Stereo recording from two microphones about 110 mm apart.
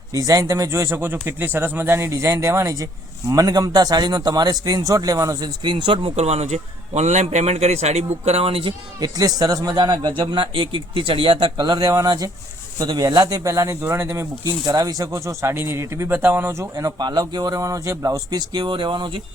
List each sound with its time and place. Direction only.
0.1 s speech: 30° right (ahead or behind)
5.7 s speech: 50° right (ahead or behind)
6.1 s a man's voice: 75° right (ahead or behind); by 8.7 s 60° right (ahead or behind)
9.0 s speech: 35° right (ahead or behind)